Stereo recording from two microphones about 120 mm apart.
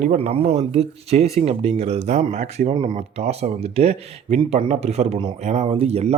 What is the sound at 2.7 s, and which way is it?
Speech, 40° right (ahead or behind).